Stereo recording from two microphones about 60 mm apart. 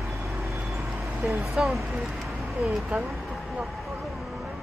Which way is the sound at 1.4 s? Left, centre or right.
Centre.